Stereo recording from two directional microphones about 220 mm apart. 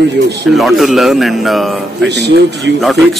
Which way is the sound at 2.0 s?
50° right (ahead or behind).